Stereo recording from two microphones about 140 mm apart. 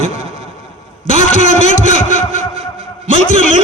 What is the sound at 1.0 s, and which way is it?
A man's voice, 60° left (ahead or behind).